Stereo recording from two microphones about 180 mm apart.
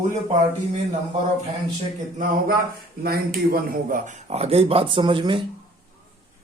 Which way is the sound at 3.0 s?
55° right (ahead or behind).